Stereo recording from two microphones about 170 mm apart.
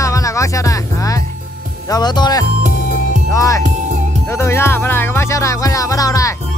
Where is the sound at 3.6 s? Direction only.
45° right (ahead or behind).